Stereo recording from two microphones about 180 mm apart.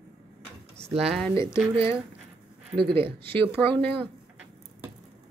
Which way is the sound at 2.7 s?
25° right (ahead or behind).